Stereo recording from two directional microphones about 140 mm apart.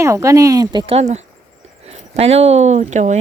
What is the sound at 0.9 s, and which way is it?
Speech, 50° right (ahead or behind).